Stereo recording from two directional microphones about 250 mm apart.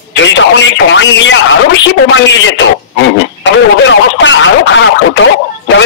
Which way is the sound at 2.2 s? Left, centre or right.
Left.